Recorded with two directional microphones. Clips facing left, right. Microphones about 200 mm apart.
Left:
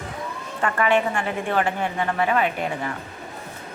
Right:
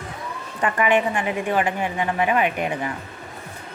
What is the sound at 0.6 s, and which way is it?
A woman's voice, 15° right (ahead or behind).